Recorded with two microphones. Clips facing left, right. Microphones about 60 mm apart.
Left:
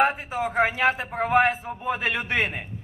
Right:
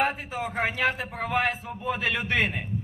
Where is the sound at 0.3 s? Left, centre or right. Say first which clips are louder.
Left 6 dB; centre; by 2.2 s left.